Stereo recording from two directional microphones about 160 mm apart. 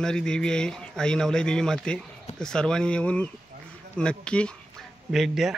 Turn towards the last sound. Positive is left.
turn(degrees=0)  # may be behind; listen again after turning